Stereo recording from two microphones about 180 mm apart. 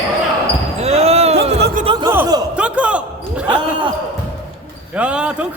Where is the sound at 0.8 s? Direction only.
35° right (ahead or behind).